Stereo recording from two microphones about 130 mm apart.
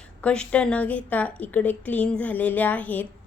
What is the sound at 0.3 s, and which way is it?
Speech, 10° left (ahead or behind).